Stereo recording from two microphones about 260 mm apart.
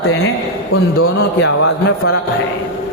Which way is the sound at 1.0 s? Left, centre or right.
Left.